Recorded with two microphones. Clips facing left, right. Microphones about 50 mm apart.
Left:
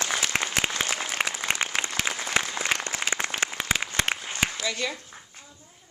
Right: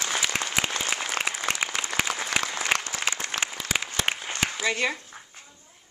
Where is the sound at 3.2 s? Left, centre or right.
Left.